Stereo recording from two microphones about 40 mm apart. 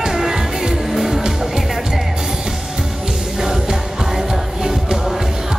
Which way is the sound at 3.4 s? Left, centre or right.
Centre.